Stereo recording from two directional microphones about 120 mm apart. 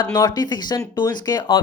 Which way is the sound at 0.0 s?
35° left (ahead or behind).